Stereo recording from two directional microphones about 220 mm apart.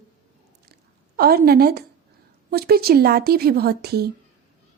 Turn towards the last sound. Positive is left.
turn(degrees=-45)  # may be behind; listen again after turning